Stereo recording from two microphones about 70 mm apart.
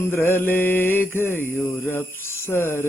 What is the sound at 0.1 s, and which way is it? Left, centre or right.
Mantra, left.